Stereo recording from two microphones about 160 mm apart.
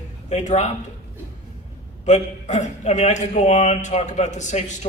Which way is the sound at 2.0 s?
45° left (ahead or behind).